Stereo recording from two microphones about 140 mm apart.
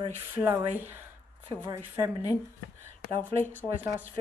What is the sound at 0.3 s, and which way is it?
Speech, 15° right (ahead or behind).